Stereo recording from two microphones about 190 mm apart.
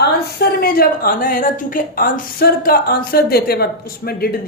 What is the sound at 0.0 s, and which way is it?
A woman's voice, 55° left (ahead or behind).